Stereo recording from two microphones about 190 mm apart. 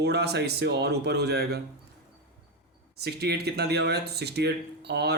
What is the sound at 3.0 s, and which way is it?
Speech, 60° right (ahead or behind).